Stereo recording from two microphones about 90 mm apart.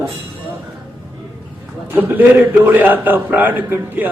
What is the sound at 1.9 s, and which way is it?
A man's voice, 20° right (ahead or behind).